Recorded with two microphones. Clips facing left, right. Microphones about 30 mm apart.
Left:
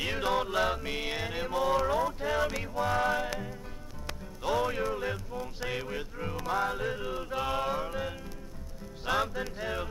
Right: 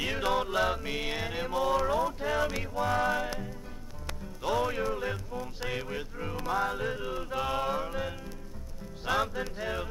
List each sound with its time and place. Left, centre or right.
0.0 s music: centre
4.4 s music: centre